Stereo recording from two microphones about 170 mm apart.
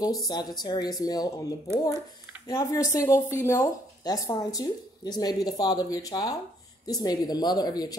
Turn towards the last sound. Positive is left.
turn(degrees=25)  # may be behind; listen again after turning